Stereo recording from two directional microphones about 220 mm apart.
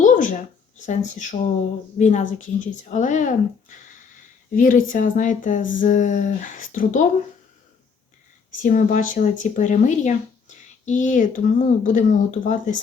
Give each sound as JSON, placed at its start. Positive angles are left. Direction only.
{"t": 0.0, "sound": "a sound", "side_deg": 35}
{"t": 0.9, "sound": "speech", "side_deg": 35}
{"t": 8.6, "sound": "speech", "side_deg": 35}